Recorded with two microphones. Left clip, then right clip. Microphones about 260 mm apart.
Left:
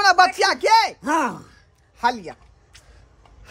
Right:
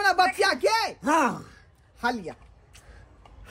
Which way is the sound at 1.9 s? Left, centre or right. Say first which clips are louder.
Left 6 dB; centre.